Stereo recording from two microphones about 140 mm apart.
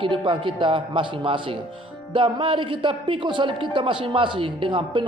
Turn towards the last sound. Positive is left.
turn(degrees=-35)  # may be behind; listen again after turning